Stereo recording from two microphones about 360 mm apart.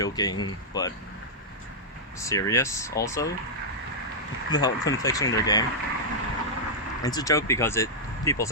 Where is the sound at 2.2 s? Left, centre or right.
Centre.